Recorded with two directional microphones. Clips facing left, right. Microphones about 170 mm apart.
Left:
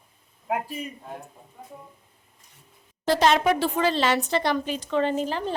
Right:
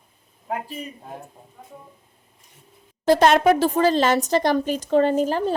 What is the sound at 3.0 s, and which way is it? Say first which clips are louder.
A woman's voice: right 5 dB; 50° right (ahead or behind).